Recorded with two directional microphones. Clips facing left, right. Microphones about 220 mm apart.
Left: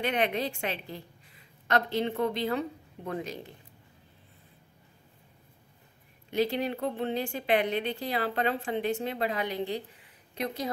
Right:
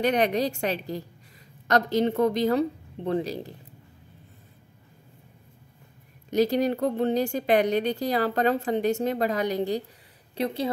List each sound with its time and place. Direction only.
0.0 s speech: 40° right (ahead or behind)
6.3 s speech: 40° right (ahead or behind)
10.3 s a woman's voice: 30° right (ahead or behind)